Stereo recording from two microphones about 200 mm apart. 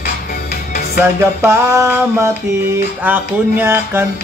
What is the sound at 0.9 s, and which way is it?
Music, 10° right (ahead or behind).